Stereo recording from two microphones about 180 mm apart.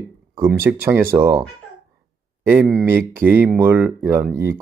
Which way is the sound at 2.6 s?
5° right (ahead or behind).